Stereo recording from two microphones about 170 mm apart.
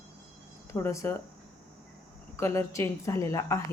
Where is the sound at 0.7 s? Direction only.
15° left (ahead or behind).